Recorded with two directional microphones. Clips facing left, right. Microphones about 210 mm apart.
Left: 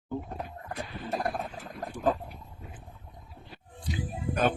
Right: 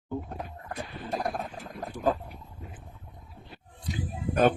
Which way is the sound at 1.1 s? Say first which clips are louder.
Even; centre (ahead or behind).